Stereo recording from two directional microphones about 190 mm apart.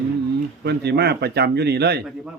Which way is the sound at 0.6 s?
60° right (ahead or behind).